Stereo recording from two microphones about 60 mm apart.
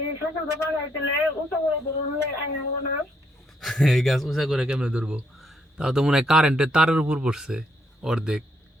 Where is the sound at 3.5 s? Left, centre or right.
Centre.